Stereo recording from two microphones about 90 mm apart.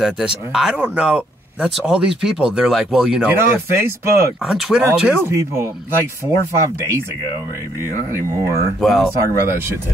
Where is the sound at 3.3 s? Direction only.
25° right (ahead or behind).